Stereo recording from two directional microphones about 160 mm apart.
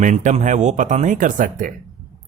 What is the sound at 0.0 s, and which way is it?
Speech, 50° right (ahead or behind).